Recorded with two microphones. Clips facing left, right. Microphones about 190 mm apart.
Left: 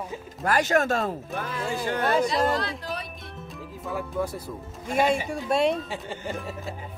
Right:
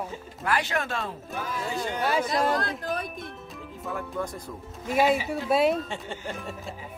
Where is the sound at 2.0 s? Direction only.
5° right (ahead or behind).